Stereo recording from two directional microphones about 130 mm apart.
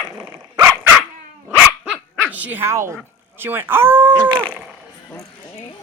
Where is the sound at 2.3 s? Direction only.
15° right (ahead or behind).